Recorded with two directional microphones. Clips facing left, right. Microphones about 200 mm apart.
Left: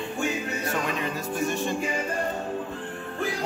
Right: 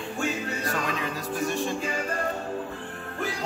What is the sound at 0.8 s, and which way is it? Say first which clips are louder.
Music: left 1 dB; centre (ahead or behind).